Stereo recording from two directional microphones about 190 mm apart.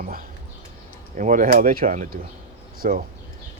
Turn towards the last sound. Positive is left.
turn(degrees=-50)  # may be behind; listen again after turning